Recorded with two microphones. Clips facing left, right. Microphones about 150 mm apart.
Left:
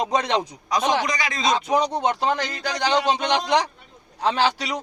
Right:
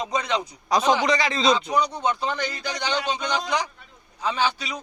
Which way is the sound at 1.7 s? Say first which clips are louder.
Left 3 dB; 90° left.